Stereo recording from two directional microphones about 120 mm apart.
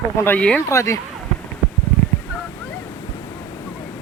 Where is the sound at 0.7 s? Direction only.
25° left (ahead or behind).